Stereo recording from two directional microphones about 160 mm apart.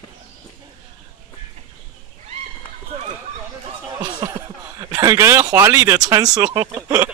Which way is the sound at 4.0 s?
30° right (ahead or behind).